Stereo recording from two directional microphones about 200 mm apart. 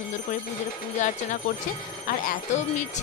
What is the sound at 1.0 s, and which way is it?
Speech, 40° left (ahead or behind).